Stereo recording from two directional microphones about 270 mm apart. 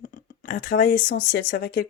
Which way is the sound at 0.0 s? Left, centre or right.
Left.